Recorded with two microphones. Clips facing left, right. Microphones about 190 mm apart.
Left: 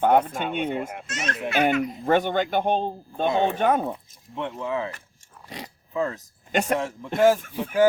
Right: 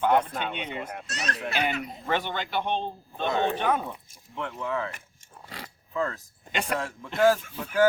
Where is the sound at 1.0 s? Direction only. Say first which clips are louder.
Left 3 dB; 35° right (ahead or behind).